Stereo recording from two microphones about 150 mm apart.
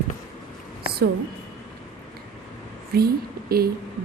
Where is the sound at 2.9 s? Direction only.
90° right.